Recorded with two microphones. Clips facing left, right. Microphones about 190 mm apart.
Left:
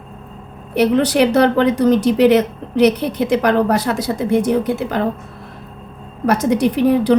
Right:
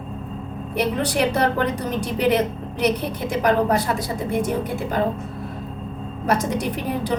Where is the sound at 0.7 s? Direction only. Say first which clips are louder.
Left 8 dB; 75° left (ahead or behind).